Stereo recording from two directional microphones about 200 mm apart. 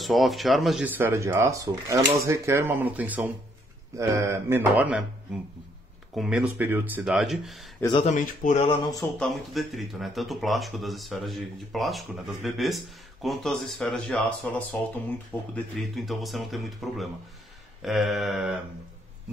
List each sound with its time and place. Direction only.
0.0 s speech: centre (ahead or behind)
6.1 s speech: 5° right (ahead or behind)
8.0 s speech: 35° left (ahead or behind)
9.2 s speech: centre (ahead or behind)